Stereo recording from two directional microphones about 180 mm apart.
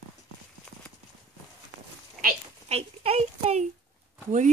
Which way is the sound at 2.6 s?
35° right (ahead or behind).